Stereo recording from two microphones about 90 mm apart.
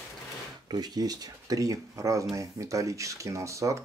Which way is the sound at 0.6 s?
50° right (ahead or behind).